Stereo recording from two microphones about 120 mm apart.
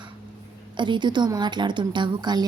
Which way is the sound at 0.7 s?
40° right (ahead or behind).